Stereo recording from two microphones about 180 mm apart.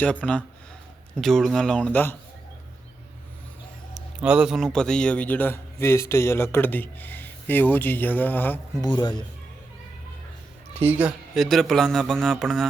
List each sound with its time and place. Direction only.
0.2 s a man's voice: 5° left (ahead or behind)
3.9 s a man's voice: 5° right (ahead or behind); by 8.6 s 10° left (ahead or behind)
8.8 s speech: 25° left (ahead or behind)
10.8 s a man's voice: 10° right (ahead or behind)